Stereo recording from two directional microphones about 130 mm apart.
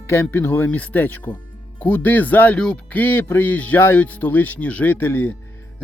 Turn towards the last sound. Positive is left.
turn(degrees=15)  # may be behind; listen again after turning